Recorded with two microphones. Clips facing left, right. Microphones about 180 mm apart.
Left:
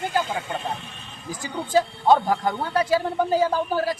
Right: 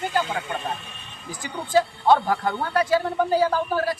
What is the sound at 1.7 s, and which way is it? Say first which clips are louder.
A man's voice: even; 15° left (ahead or behind).